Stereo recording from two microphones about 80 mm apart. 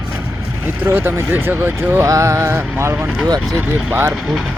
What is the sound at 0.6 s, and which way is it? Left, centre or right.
Speech, right.